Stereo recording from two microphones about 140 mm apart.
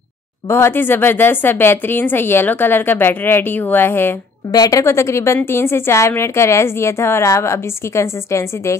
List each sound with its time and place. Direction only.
0.5 s a woman's voice: 15° left (ahead or behind)